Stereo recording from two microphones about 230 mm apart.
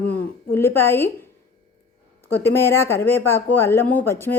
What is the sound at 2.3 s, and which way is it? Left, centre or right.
A woman's voice, centre.